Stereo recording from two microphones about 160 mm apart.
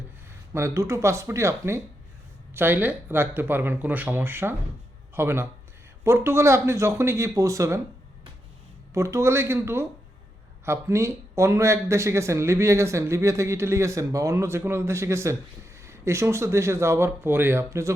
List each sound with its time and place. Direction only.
0.5 s speech: 15° right (ahead or behind)
8.9 s speech: 20° right (ahead or behind)